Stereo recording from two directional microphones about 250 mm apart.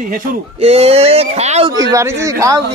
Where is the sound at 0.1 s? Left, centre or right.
Right.